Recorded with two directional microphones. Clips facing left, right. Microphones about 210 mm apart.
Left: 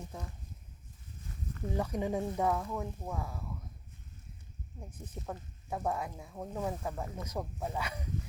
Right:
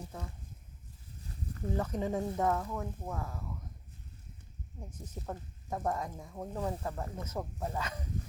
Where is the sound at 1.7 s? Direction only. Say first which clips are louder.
Left 1 dB; 10° left (ahead or behind).